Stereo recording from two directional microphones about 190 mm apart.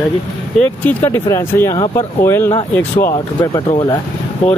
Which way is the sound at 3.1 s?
25° left (ahead or behind).